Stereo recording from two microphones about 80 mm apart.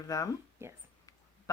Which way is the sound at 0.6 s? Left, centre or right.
Right.